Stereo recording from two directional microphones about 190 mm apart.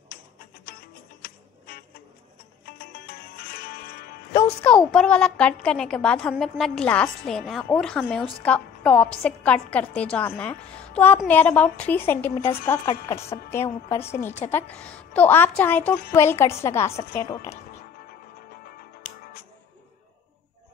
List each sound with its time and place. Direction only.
1.2 s music: 50° left (ahead or behind)
4.6 s a woman's voice: 5° left (ahead or behind)